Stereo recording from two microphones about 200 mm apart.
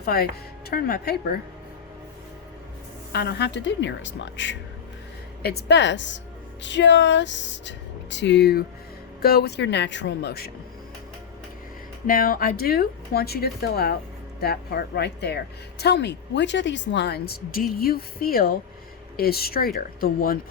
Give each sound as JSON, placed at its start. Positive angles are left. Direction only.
{"t": 0.0, "sound": "speech", "side_deg": 50}
{"t": 3.1, "sound": "speech", "side_deg": 55}
{"t": 5.4, "sound": "speech", "side_deg": 50}
{"t": 12.0, "sound": "speech", "side_deg": 45}